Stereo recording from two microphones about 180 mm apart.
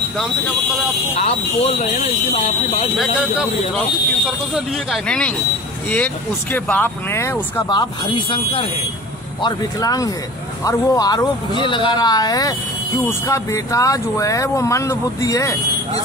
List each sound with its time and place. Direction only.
1.1 s speech: 40° left (ahead or behind)
3.0 s speech: centre (ahead or behind); by 7.3 s 15° left (ahead or behind)
7.7 s speech: 25° left (ahead or behind)